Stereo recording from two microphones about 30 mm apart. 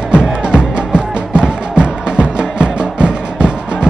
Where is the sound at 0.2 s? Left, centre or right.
Right.